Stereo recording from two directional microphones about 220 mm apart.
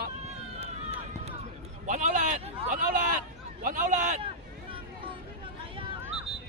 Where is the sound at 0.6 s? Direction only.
30° right (ahead or behind).